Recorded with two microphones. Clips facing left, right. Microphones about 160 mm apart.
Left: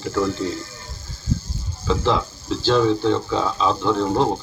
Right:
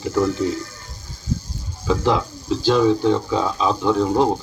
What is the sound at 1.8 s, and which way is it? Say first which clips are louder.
Speech: right 1 dB; 15° right (ahead or behind).